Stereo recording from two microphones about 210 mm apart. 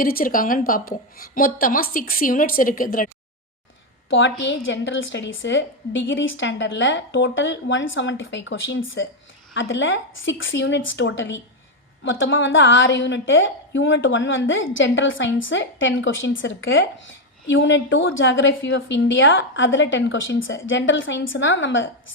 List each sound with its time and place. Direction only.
0.0 s a woman's voice: 45° left (ahead or behind)
4.1 s a woman's voice: 65° left (ahead or behind)